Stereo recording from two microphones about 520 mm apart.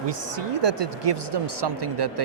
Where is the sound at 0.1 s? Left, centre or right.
Right.